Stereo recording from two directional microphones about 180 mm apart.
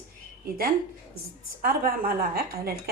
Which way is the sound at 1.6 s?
55° right (ahead or behind).